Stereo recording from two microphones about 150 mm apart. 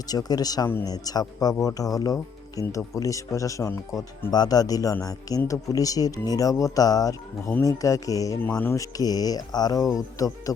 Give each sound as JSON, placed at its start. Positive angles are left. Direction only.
{"t": 0.1, "sound": "speech", "side_deg": 25}
{"t": 8.4, "sound": "speech", "side_deg": 10}